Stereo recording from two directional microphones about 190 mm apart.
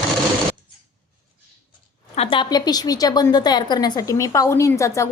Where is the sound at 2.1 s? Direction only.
30° left (ahead or behind).